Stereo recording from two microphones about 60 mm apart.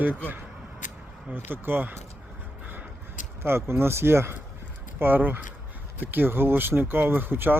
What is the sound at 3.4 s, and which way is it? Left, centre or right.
Speech, right.